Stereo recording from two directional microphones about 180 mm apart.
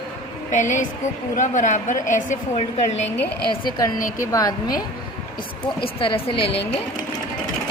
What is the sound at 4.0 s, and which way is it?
Speech, 50° left (ahead or behind).